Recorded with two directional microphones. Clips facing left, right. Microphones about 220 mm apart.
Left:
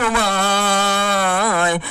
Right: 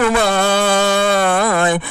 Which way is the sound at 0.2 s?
45° right (ahead or behind).